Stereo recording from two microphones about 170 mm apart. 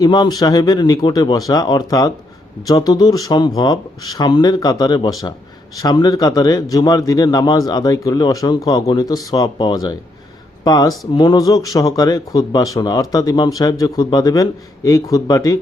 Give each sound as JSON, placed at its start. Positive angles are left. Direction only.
{"t": 0.0, "sound": "speech", "side_deg": 25}